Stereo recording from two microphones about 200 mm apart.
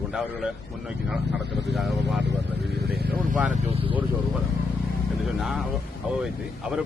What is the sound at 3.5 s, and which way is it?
Speech, 30° right (ahead or behind).